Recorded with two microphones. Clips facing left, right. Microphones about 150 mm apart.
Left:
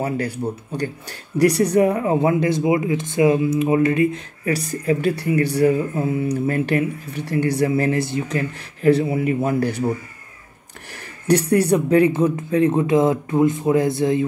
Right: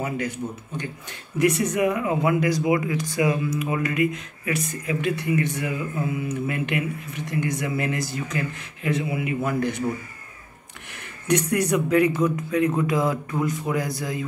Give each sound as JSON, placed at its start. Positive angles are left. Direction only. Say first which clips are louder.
{"t": 0.0, "sound": "speech", "louder": "left 5 dB", "side_deg": 35}
{"t": 10.9, "sound": "speech", "louder": "left 5 dB", "side_deg": 35}